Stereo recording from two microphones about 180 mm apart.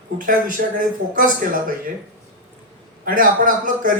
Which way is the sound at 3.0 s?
50° right (ahead or behind).